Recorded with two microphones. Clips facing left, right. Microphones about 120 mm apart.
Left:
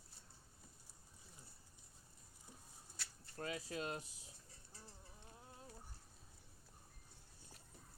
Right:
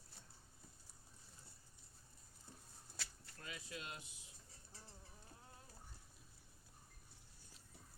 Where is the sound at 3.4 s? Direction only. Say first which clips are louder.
Left 8 dB; 35° left (ahead or behind).